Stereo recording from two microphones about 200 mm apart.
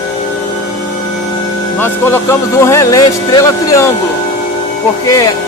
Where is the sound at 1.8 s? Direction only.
10° left (ahead or behind).